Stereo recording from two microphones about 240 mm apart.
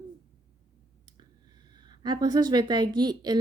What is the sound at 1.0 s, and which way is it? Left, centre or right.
Speech, centre.